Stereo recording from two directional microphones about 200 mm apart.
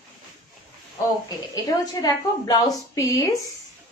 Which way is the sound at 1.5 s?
20° left (ahead or behind).